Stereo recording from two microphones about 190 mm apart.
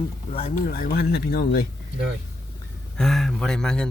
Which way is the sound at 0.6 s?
50° left (ahead or behind).